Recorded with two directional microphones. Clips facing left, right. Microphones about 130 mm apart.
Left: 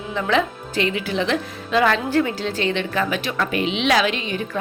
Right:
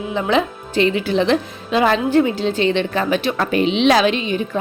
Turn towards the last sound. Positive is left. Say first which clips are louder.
# right 4 dB
turn(degrees=-25)  # may be behind; listen again after turning